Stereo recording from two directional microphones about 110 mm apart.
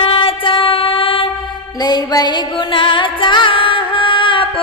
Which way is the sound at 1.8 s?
40° left (ahead or behind).